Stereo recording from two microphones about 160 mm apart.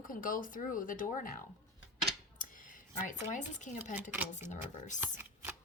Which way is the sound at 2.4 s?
55° left (ahead or behind).